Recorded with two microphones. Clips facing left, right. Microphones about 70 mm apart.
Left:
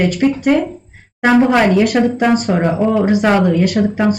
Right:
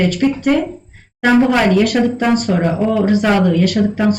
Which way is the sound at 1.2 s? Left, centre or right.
Left.